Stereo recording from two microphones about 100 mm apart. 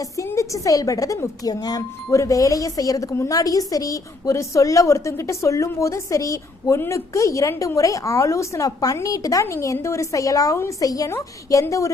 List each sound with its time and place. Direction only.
0.2 s speech: 30° left (ahead or behind)